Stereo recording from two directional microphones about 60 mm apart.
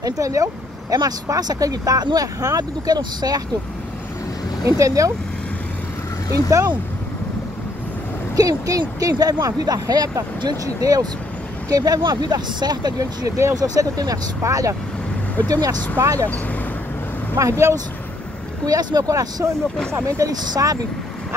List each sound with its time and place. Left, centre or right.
0.0 s speech: right
4.6 s speech: right
6.5 s speech: right
8.4 s speech: right
15.4 s speech: right
16.0 s speech: right
17.4 s speech: right
18.7 s speech: right